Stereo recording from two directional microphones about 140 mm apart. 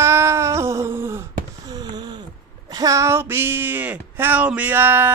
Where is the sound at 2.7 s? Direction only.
25° right (ahead or behind).